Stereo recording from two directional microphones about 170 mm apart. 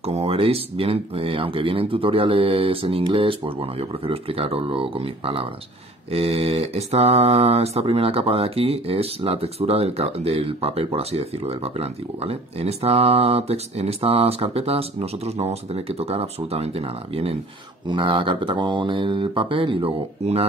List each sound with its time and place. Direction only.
0.0 s speech: 35° right (ahead or behind)